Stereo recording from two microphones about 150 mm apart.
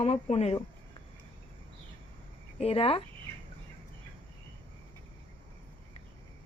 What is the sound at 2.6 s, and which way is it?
Speech, 40° left (ahead or behind).